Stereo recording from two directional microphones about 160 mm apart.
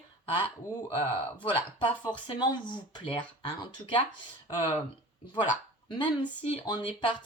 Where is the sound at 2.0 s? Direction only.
25° left (ahead or behind).